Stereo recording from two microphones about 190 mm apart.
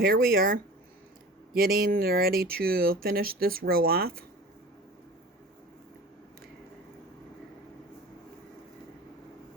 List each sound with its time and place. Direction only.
0.0 s speech: 50° right (ahead or behind)